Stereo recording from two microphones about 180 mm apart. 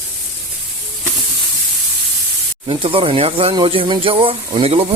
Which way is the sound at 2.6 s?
30° right (ahead or behind).